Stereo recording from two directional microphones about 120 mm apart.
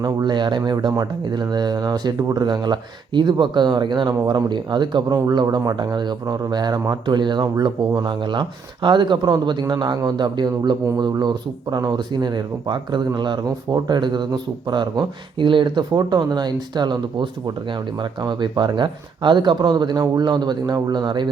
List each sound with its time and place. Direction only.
0.0 s speech: 35° right (ahead or behind)